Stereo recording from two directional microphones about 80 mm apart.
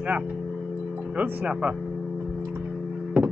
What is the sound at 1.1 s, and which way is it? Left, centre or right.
Speech, centre.